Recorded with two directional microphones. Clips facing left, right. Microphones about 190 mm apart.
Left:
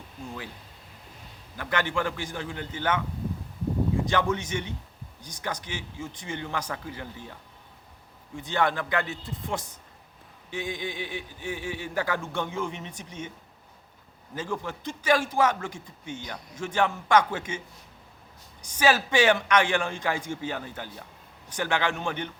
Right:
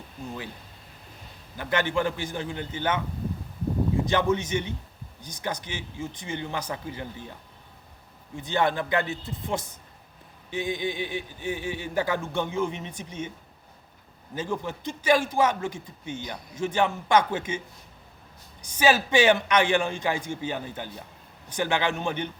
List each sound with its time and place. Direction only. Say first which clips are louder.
1.5 s speech: right 2 dB; 20° right (ahead or behind)
4.1 s speech: right 2 dB; 20° right (ahead or behind)
8.4 s speech: right 1 dB; 20° right (ahead or behind)
14.3 s speech: right 2 dB; 20° right (ahead or behind)
18.8 s speech: right 1 dB; 20° right (ahead or behind)